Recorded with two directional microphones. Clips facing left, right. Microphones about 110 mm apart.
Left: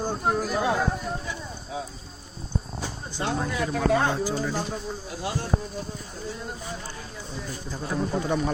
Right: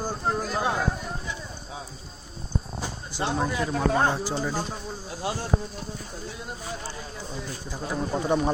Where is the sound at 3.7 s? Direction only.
35° right (ahead or behind).